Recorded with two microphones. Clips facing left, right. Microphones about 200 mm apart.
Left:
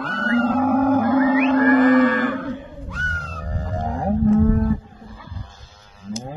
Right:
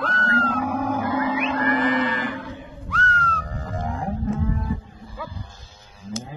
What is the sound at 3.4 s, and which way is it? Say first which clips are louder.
Livestock: left 3 dB; 35° left (ahead or behind).